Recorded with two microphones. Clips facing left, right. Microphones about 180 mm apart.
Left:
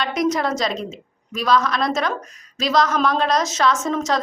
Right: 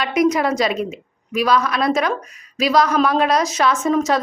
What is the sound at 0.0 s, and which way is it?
A woman's voice, 5° right (ahead or behind).